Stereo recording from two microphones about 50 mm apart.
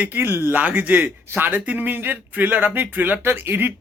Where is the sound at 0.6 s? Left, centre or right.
Right.